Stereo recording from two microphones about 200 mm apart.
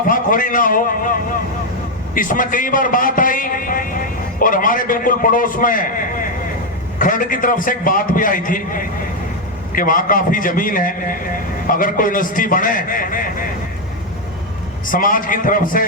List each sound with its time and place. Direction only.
0.1 s a man's voice: 45° left (ahead or behind)
14.8 s a man's voice: 45° left (ahead or behind)